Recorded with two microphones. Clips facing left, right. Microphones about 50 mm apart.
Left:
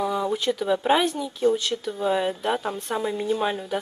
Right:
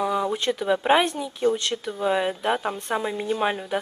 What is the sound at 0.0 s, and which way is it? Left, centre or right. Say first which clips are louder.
A woman's voice: even; centre.